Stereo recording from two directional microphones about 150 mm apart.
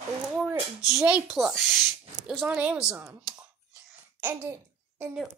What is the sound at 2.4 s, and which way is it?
Speech, 10° right (ahead or behind).